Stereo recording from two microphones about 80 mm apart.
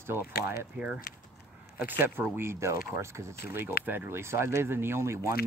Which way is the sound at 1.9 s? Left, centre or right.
Right.